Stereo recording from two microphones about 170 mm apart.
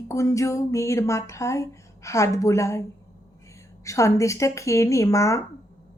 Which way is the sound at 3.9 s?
20° left (ahead or behind).